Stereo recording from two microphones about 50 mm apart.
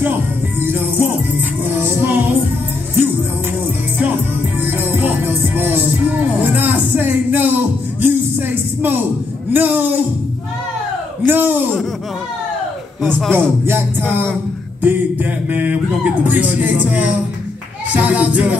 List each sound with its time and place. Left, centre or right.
0.0 s music: right
4.6 s music: right
9.5 s speech: right
11.2 s a sound: right
13.3 s music: right